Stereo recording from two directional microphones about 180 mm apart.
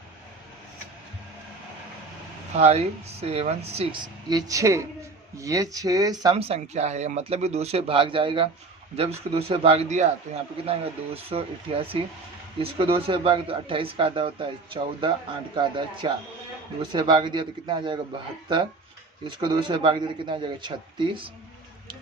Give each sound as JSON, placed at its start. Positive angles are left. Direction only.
{"t": 2.6, "sound": "speech", "side_deg": -35}
{"t": 3.8, "sound": "speech", "side_deg": -25}
{"t": 6.3, "sound": "speech", "side_deg": -35}